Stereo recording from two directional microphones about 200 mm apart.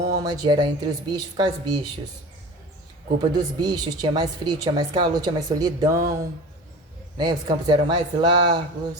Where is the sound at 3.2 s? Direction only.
20° right (ahead or behind).